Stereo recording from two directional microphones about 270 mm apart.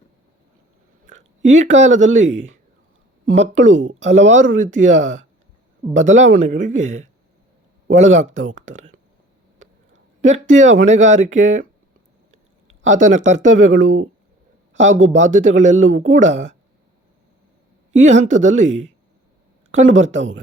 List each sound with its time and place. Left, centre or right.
1.0 s speech: right
3.2 s speech: right
10.2 s speech: right
12.8 s speech: right
14.7 s a sound: right
15.2 s speech: right
18.0 s speech: right
19.7 s speech: right